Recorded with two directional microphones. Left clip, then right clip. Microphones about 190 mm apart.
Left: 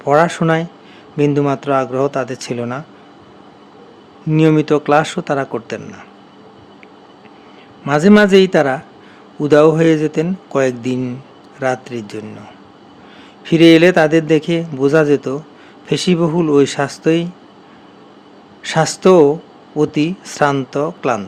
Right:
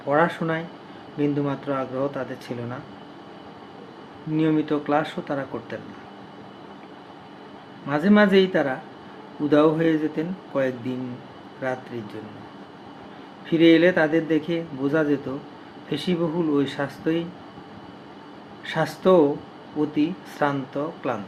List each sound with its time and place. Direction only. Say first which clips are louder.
0.1 s a man's voice: left 9 dB; 65° left (ahead or behind)
4.3 s a man's voice: left 10 dB; 65° left (ahead or behind)
7.9 s a man's voice: left 9 dB; 65° left (ahead or behind)
13.4 s a man's voice: left 8 dB; 65° left (ahead or behind)
18.6 s a man's voice: left 9 dB; 65° left (ahead or behind)